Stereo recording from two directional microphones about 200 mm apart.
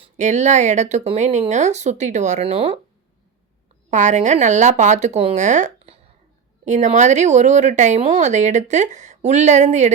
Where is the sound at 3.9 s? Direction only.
35° right (ahead or behind).